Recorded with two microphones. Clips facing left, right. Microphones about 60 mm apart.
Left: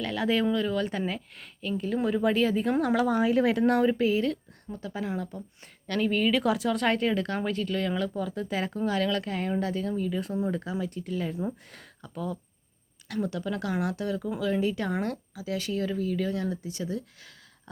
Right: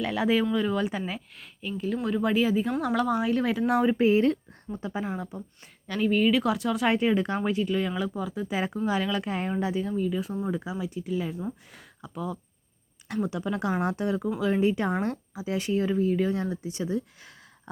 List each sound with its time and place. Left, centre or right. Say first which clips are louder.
0.0 s speech: right 2 dB; centre
3.7 s speech: even; centre
3.9 s speech: right 4 dB; right
9.9 s speech: right 1 dB; centre
13.2 s speech: right 3 dB; centre